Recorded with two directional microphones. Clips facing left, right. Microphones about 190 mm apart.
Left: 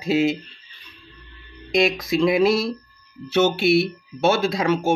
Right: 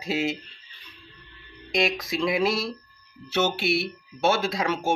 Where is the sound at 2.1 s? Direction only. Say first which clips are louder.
Left 7 dB; 20° left (ahead or behind).